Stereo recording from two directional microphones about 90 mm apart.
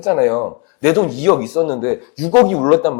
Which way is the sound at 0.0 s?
20° left (ahead or behind).